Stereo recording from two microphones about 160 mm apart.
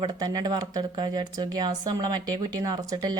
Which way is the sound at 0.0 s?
25° right (ahead or behind).